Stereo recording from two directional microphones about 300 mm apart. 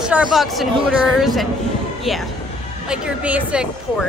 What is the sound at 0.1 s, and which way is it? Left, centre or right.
Speech, centre.